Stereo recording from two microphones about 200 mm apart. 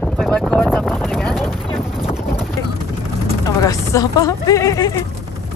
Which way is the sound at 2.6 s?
15° left (ahead or behind).